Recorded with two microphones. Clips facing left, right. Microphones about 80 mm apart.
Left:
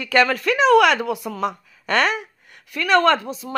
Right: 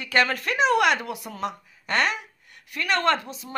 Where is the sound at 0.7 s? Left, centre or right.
Left.